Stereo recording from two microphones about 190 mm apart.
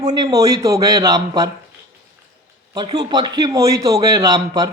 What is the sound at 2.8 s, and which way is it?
A man's voice, 20° right (ahead or behind).